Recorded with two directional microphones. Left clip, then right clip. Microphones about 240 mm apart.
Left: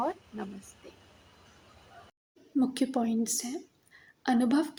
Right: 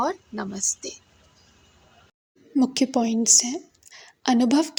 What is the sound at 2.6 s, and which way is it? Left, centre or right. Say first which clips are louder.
A woman's voice: right 7 dB; right.